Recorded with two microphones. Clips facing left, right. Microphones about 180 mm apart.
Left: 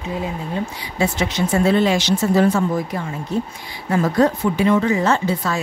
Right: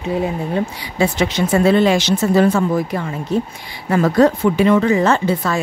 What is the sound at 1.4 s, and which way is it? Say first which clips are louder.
Speech: even; 90° right.